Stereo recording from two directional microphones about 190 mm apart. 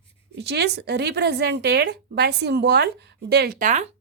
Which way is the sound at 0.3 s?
60° right (ahead or behind).